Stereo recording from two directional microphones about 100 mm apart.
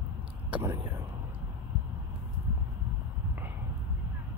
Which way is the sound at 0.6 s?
25° right (ahead or behind).